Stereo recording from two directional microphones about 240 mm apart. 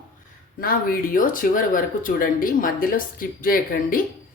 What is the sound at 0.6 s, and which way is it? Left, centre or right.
Speech, left.